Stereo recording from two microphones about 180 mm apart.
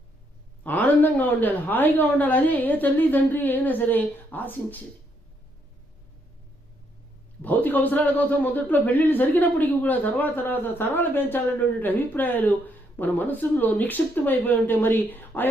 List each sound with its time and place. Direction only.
0.7 s a man's voice: 10° left (ahead or behind)
7.4 s a man's voice: 10° left (ahead or behind)